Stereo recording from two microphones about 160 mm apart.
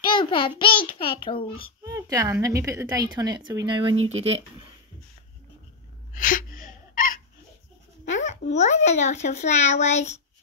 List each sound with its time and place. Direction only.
0.0 s a child's voice: 30° left (ahead or behind)
1.9 s a woman's voice: 20° right (ahead or behind)
6.1 s gasp: 55° left (ahead or behind)
8.1 s a child's voice: 45° left (ahead or behind)